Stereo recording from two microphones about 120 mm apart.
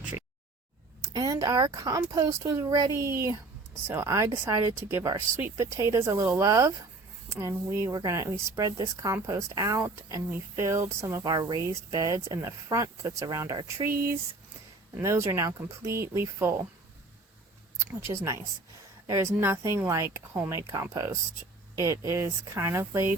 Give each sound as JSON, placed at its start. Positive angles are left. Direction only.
{"t": 1.0, "sound": "speech", "side_deg": -30}
{"t": 14.9, "sound": "speech", "side_deg": -25}
{"t": 18.0, "sound": "speech", "side_deg": -25}